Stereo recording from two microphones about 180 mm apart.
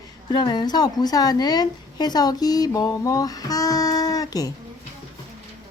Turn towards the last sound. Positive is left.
turn(degrees=20)  # may be behind; listen again after turning